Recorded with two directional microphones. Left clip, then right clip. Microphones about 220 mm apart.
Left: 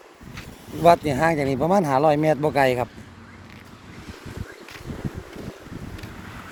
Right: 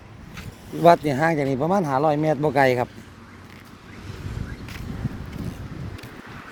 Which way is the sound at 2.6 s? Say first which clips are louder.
Right 1 dB; 20° right (ahead or behind).